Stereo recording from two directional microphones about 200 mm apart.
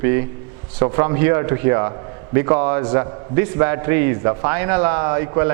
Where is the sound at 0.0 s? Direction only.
15° right (ahead or behind).